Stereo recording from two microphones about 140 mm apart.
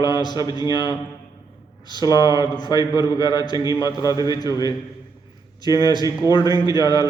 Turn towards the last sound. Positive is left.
turn(degrees=30)  # may be behind; listen again after turning